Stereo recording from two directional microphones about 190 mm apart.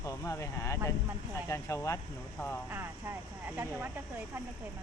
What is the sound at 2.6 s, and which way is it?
Speech, 10° right (ahead or behind).